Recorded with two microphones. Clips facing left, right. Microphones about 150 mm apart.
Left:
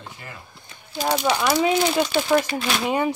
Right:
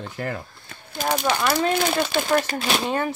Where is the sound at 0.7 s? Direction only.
50° right (ahead or behind).